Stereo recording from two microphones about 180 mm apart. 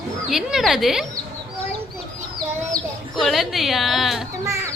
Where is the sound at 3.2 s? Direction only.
Centre (ahead or behind).